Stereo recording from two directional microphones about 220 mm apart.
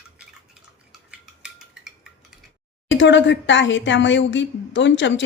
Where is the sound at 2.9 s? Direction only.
55° left (ahead or behind).